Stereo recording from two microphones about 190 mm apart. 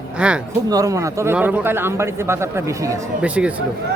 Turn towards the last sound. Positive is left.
turn(degrees=-5)  # may be behind; listen again after turning